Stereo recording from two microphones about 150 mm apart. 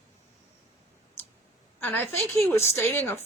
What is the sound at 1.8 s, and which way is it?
Speech, 15° left (ahead or behind).